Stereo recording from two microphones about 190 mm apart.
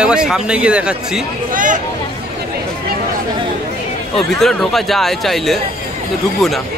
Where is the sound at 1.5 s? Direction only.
45° right (ahead or behind).